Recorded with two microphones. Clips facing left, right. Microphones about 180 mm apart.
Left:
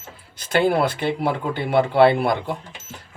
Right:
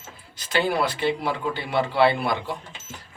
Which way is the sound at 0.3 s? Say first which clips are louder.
Left 5 dB; 50° left (ahead or behind).